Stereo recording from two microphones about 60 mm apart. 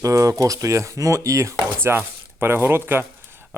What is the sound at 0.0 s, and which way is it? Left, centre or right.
Speech, right.